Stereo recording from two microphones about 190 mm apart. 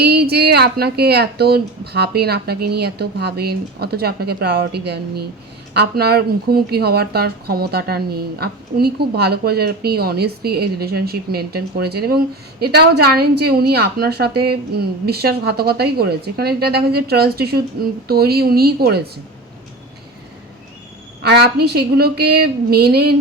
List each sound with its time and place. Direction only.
0.0 s a woman's voice: 60° right (ahead or behind)
21.2 s a woman's voice: 60° right (ahead or behind)